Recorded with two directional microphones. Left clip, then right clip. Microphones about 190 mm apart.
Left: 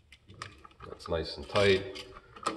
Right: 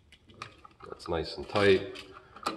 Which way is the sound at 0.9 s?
45° right (ahead or behind).